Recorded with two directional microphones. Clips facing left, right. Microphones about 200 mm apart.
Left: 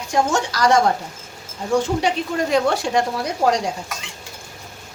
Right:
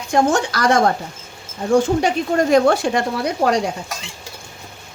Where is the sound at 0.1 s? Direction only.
55° right (ahead or behind).